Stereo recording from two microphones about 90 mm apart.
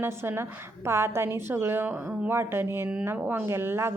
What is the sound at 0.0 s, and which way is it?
A woman's voice, 25° right (ahead or behind).